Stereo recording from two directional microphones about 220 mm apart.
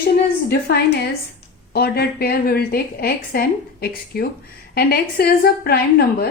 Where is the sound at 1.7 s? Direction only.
45° left (ahead or behind).